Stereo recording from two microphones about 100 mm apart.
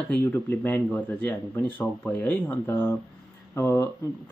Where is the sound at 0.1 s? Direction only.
20° left (ahead or behind).